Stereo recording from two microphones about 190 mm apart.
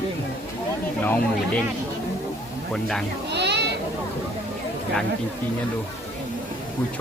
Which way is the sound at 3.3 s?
65° right (ahead or behind).